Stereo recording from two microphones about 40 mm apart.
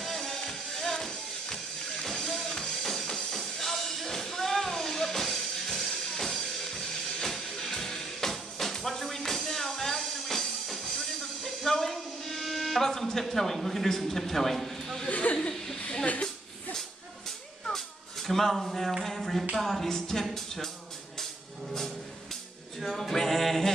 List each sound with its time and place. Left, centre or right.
0.0 s music: centre
15.0 s speech: left
15.3 s chuckle: centre
16.1 s a sound: left
17.7 s a sound: centre
20.2 s music: centre
22.8 s music: centre